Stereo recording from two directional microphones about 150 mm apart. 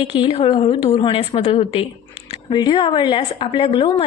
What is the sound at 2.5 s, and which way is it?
A woman's voice, 30° left (ahead or behind).